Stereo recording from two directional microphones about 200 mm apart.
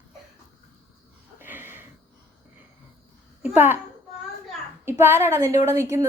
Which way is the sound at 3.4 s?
10° right (ahead or behind).